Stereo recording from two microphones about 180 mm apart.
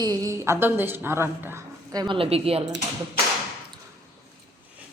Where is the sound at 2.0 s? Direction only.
30° right (ahead or behind).